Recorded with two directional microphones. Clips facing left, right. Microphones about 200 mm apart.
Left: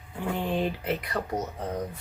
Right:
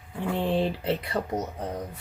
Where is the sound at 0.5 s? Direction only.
30° right (ahead or behind).